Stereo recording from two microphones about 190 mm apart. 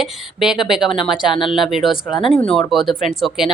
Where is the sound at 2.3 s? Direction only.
5° left (ahead or behind).